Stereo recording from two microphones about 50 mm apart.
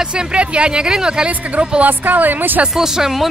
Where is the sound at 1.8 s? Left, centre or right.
Right.